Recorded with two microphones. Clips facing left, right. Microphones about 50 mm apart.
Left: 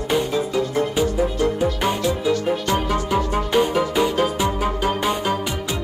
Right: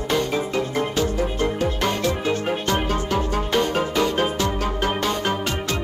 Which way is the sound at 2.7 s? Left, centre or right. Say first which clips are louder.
Even; centre.